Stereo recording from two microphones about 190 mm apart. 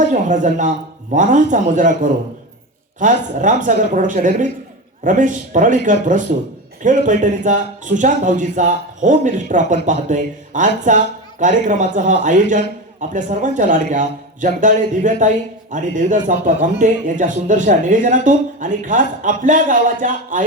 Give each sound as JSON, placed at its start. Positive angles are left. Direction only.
{"t": 0.0, "sound": "a woman's voice", "side_deg": -40}